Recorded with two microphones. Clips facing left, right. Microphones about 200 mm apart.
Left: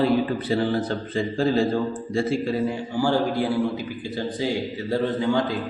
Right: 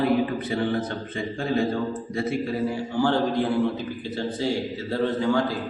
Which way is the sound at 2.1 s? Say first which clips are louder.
Left 4 dB; 30° left (ahead or behind).